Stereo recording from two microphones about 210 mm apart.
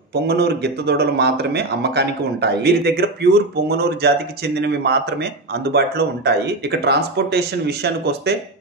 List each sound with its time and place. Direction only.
0.1 s a man's voice: 50° right (ahead or behind)